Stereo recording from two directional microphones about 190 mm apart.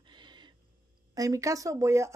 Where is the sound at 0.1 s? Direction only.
25° right (ahead or behind).